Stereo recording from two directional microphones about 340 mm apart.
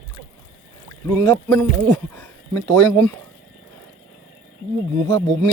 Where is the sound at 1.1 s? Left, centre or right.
Centre.